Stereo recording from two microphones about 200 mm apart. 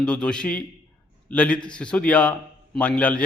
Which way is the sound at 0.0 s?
5° left (ahead or behind).